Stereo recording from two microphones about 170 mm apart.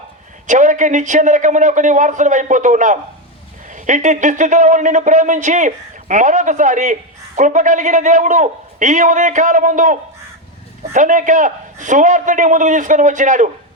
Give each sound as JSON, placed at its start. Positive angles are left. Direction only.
{"t": 0.4, "sound": "speech", "side_deg": -45}